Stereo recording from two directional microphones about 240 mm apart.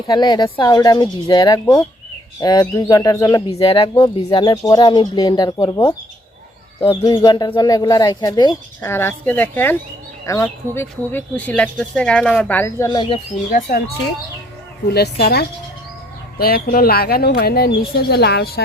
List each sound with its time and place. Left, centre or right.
0.1 s speech: centre
13.5 s speech: left
14.8 s speech: left